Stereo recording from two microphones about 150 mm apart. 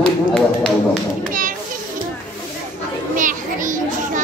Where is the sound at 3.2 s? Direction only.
60° right (ahead or behind).